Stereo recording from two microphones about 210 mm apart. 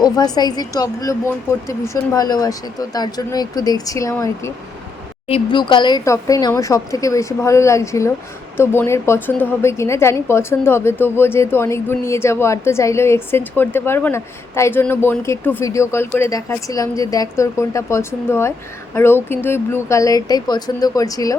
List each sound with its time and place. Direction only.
0.0 s a woman's voice: 20° left (ahead or behind)